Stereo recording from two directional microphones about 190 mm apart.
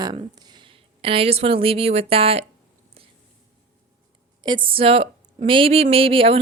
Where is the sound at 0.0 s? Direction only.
20° right (ahead or behind).